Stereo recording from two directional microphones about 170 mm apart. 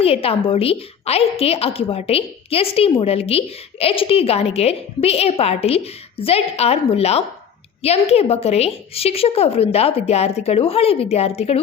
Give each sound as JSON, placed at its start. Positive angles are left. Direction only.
{"t": 0.0, "sound": "a woman's voice", "side_deg": 35}